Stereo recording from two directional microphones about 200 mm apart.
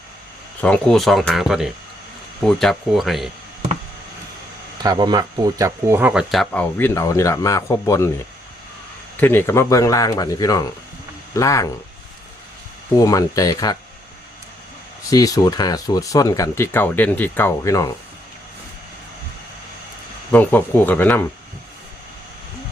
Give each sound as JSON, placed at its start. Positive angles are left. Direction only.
{"t": 0.6, "sound": "speech", "side_deg": 5}
{"t": 4.8, "sound": "speech", "side_deg": -20}
{"t": 9.1, "sound": "speech", "side_deg": 10}
{"t": 13.0, "sound": "speech", "side_deg": 15}
{"t": 15.1, "sound": "speech", "side_deg": 15}
{"t": 20.3, "sound": "speech", "side_deg": 10}